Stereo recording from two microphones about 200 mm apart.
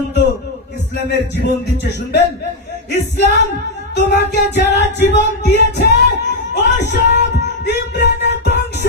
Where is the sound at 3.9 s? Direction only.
60° left (ahead or behind).